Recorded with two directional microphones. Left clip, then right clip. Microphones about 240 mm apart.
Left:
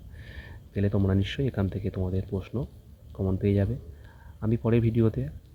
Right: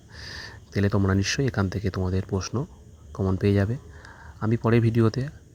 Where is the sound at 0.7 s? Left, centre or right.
Right.